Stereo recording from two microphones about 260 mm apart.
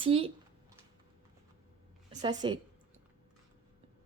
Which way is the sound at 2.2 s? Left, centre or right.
Centre.